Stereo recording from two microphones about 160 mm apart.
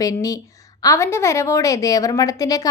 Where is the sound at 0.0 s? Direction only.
20° left (ahead or behind).